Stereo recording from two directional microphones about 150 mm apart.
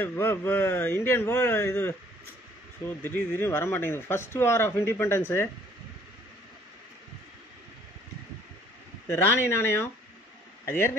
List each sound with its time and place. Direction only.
0.0 s speech: 15° left (ahead or behind)
3.0 s speech: 15° left (ahead or behind)
9.0 s speech: 15° left (ahead or behind)
10.6 s a sound: 15° left (ahead or behind)